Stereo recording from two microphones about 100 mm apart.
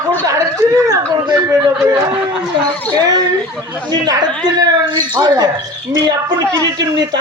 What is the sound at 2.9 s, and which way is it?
Speech, 40° right (ahead or behind).